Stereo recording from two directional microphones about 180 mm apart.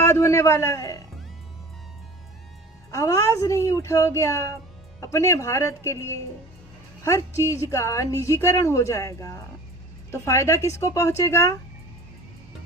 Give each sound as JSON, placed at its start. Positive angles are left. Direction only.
{"t": 0.0, "sound": "a man's voice", "side_deg": 15}
{"t": 2.9, "sound": "a woman's voice", "side_deg": 15}